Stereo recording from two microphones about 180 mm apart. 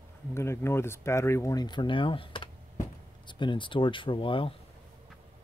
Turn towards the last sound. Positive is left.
turn(degrees=30)  # may be behind; listen again after turning